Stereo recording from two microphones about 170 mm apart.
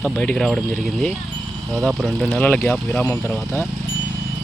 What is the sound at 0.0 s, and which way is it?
Speech, 5° left (ahead or behind).